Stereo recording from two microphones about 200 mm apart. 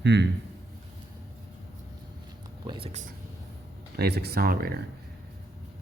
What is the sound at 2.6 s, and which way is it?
Speech, 25° right (ahead or behind).